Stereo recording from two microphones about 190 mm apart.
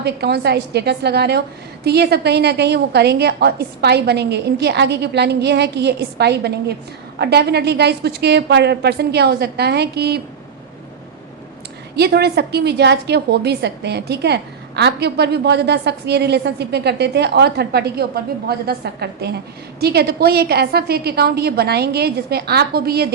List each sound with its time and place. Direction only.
0.0 s a woman's voice: 60° right (ahead or behind)
11.9 s a woman's voice: 60° right (ahead or behind)